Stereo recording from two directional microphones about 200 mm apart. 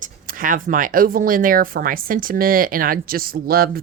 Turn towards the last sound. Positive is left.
turn(degrees=-50)  # may be behind; listen again after turning